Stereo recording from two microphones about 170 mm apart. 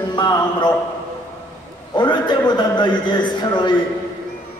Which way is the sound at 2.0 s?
25° left (ahead or behind).